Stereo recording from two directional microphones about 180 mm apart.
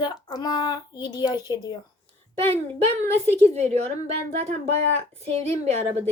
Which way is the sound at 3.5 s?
35° right (ahead or behind).